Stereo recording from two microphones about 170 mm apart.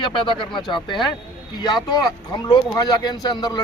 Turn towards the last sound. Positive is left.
turn(degrees=25)  # may be behind; listen again after turning